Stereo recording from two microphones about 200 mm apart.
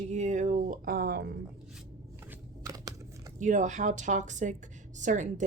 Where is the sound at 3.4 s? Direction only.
40° right (ahead or behind).